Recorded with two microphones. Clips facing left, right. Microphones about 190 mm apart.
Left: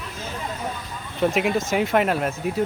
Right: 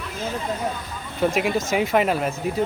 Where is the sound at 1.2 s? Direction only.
Centre (ahead or behind).